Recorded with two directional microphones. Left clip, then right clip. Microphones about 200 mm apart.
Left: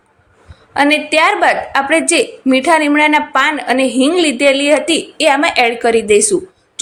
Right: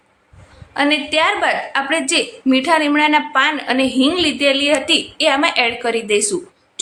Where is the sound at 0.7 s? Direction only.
20° left (ahead or behind).